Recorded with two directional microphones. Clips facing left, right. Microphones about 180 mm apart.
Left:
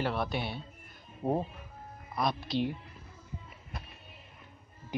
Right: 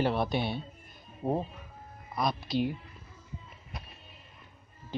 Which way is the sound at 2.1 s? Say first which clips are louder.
Right 1 dB; centre (ahead or behind).